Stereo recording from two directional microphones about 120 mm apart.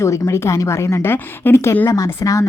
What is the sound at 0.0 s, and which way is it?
Speech, 25° left (ahead or behind).